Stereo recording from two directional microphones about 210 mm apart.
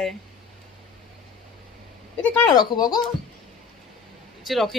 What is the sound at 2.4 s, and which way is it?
Speech, 20° left (ahead or behind).